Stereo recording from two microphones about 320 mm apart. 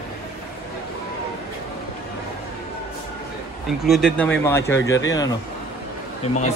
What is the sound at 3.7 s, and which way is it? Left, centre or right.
Speech, centre.